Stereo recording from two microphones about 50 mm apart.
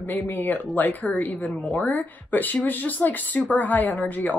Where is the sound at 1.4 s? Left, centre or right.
Centre.